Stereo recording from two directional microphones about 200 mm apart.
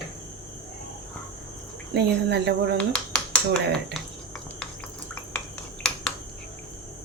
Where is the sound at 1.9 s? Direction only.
55° right (ahead or behind).